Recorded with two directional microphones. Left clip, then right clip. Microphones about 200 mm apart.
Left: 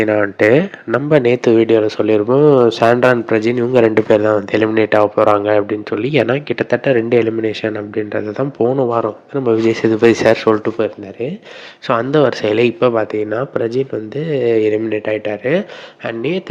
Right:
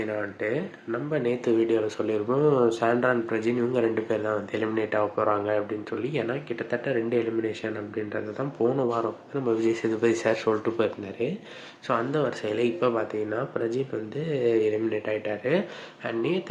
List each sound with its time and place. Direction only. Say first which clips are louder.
0.0 s speech: left 17 dB; 45° left (ahead or behind)
11.9 s speech: left 13 dB; 40° left (ahead or behind)